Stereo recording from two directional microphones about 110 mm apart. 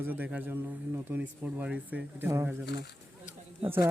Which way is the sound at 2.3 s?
25° right (ahead or behind).